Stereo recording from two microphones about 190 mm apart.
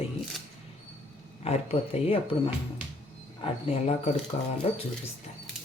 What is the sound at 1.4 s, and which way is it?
Speech, 35° left (ahead or behind).